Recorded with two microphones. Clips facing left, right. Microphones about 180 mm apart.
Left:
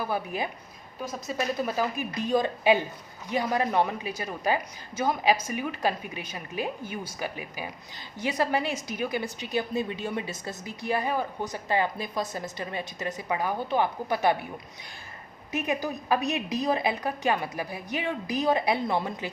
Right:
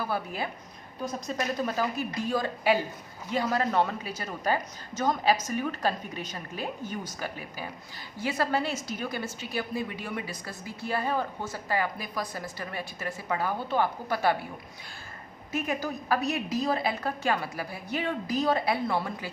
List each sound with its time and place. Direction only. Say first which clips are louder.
0.1 s speech: left 2 dB; 15° left (ahead or behind)
15.5 s speech: left 1 dB; 20° left (ahead or behind)